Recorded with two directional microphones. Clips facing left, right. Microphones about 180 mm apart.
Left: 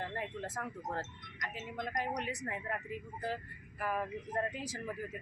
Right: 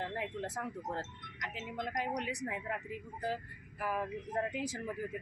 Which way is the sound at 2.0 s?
15° right (ahead or behind).